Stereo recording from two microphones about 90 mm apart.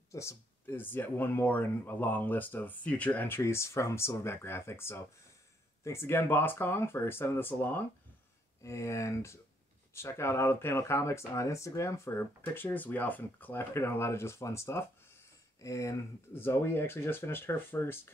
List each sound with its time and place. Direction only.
0.1 s speech: 30° left (ahead or behind)
3.3 s speech: 30° left (ahead or behind)